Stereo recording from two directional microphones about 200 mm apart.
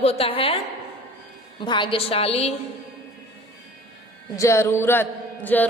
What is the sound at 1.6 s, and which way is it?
Speech, 25° left (ahead or behind).